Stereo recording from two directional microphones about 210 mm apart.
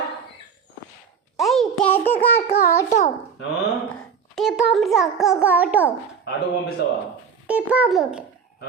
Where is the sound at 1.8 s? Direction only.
10° left (ahead or behind).